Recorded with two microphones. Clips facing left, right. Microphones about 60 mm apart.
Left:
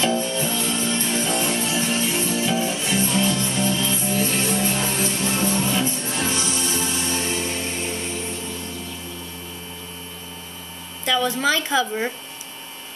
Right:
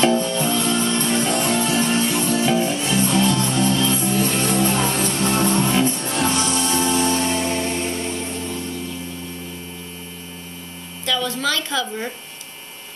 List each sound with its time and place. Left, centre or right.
0.0 s music: right
11.1 s a woman's voice: centre